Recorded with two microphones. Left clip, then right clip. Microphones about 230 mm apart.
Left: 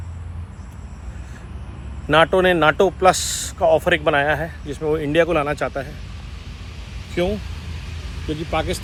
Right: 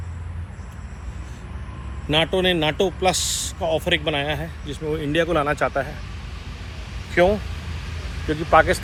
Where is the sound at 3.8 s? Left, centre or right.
Left.